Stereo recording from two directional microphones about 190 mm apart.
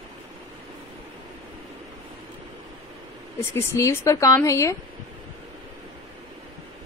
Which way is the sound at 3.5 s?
15° left (ahead or behind).